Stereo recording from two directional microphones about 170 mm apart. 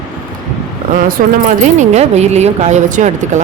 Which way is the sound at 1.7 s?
40° right (ahead or behind).